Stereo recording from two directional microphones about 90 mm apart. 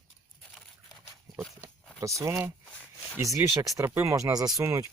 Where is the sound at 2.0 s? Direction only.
35° right (ahead or behind).